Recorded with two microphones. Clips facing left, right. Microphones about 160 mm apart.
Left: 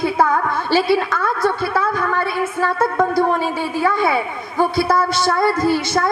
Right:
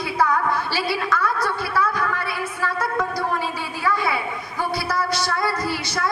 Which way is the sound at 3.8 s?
25° left (ahead or behind).